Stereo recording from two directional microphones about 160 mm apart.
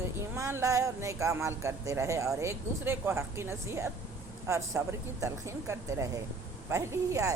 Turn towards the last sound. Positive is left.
turn(degrees=-20)  # may be behind; listen again after turning